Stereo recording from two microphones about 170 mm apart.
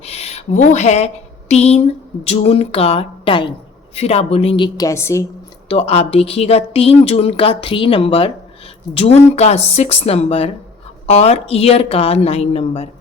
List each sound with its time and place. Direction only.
0.0 s a woman's voice: 40° left (ahead or behind); by 5.2 s 15° left (ahead or behind)
5.6 s a woman's voice: 35° left (ahead or behind)